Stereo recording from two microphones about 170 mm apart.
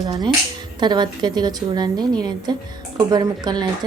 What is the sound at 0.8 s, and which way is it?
A woman's voice, 25° right (ahead or behind).